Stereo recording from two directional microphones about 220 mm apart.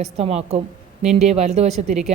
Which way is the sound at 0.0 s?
30° right (ahead or behind).